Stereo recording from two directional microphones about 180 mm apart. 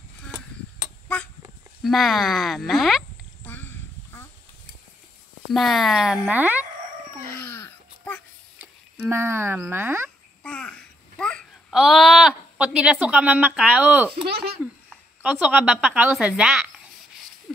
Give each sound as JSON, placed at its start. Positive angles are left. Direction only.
{"t": 1.0, "sound": "honk", "side_deg": 5}
{"t": 1.8, "sound": "speech", "side_deg": 0}
{"t": 3.4, "sound": "a sound", "side_deg": 10}
{"t": 5.5, "sound": "speech", "side_deg": 0}
{"t": 7.4, "sound": "a sound", "side_deg": 15}
{"t": 8.5, "sound": "speech", "side_deg": -10}
{"t": 10.4, "sound": "babbling", "side_deg": 5}
{"t": 13.6, "sound": "a woman's voice", "side_deg": -10}
{"t": 14.2, "sound": "a sound", "side_deg": -60}
{"t": 15.2, "sound": "a woman's voice", "side_deg": -10}